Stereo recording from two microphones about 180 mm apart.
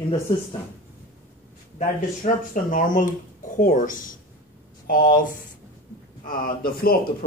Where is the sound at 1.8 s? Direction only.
45° left (ahead or behind).